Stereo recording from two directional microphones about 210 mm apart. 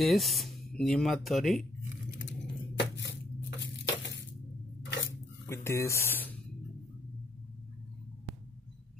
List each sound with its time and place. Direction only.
0.0 s speech: centre (ahead or behind)
2.8 s a sound: 55° left (ahead or behind)
5.5 s speech: 15° left (ahead or behind)